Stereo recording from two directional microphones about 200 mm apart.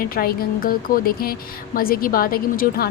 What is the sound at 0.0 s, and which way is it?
Speech, 50° left (ahead or behind).